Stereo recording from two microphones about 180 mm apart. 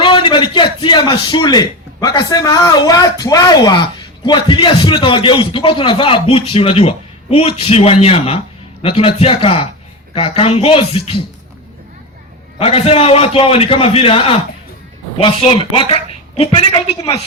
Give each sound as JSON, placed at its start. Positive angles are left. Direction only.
{"t": 0.0, "sound": "a man's voice", "side_deg": 30}
{"t": 12.5, "sound": "a man's voice", "side_deg": 35}